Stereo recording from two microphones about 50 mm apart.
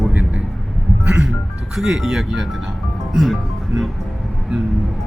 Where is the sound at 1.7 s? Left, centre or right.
Centre.